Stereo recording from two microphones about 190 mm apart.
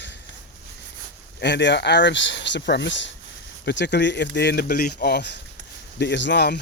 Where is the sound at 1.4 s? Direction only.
65° left (ahead or behind).